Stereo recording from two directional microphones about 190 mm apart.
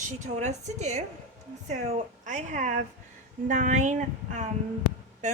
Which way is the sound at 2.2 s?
40° right (ahead or behind).